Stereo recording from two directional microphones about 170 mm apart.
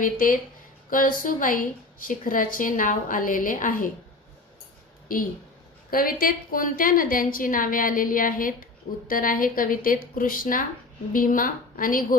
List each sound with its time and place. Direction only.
0.0 s a woman's voice: 55° left (ahead or behind)
5.9 s a woman's voice: 60° left (ahead or behind)